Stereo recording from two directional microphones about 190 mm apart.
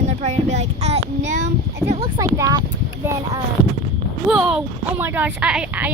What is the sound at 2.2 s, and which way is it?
Speech, 20° right (ahead or behind).